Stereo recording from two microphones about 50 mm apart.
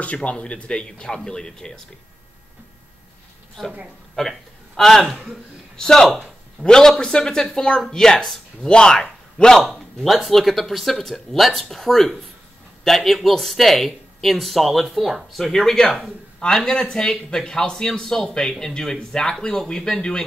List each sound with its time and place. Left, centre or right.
0.0 s speech: left
3.6 s a man's voice: centre
9.6 s a man's voice: centre